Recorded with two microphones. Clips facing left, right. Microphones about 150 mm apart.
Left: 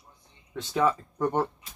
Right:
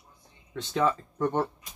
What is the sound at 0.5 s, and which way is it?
Speech, 10° left (ahead or behind).